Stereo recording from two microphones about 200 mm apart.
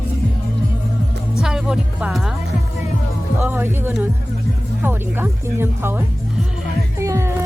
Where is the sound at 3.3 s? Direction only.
10° right (ahead or behind).